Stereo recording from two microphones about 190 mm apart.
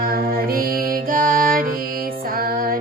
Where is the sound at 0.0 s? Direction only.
50° right (ahead or behind).